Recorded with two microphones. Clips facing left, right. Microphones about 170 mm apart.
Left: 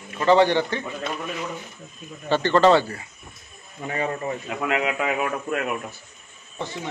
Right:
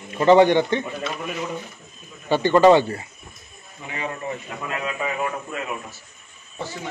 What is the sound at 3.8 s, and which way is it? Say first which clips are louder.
Speech: left 6 dB; 55° left (ahead or behind).